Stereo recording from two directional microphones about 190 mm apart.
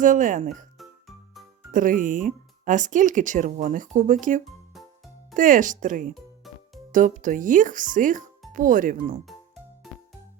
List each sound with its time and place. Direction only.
0.0 s speech: 45° right (ahead or behind)
0.8 s music: centre (ahead or behind)
1.7 s speech: 45° right (ahead or behind)
4.4 s music: centre (ahead or behind)
5.4 s speech: 45° right (ahead or behind)
6.4 s music: centre (ahead or behind)
6.9 s speech: 40° right (ahead or behind)